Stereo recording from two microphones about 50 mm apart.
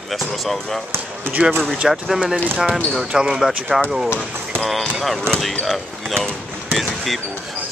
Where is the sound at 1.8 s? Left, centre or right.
Centre.